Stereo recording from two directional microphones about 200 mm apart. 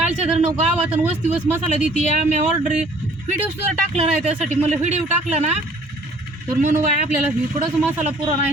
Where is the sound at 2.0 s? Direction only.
35° right (ahead or behind).